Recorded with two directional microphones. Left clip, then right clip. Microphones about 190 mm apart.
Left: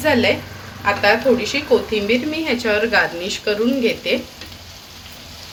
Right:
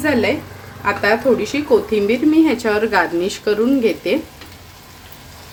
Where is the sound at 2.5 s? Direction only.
60° right (ahead or behind).